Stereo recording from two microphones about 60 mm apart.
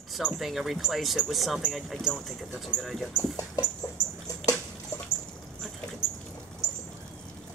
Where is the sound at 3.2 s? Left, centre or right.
Left.